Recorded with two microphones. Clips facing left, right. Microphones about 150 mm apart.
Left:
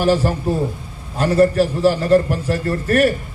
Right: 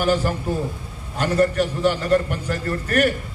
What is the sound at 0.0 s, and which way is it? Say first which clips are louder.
A man's voice: left 4 dB; 30° left (ahead or behind).